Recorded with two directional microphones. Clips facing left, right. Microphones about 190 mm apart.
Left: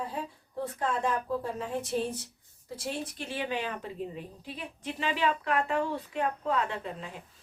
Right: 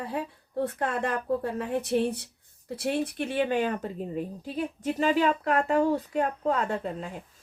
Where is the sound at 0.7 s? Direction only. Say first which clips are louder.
Right 1 dB; 65° right (ahead or behind).